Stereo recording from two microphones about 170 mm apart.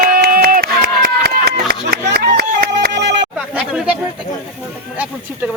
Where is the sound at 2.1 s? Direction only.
60° right (ahead or behind); by 3.2 s 90° right.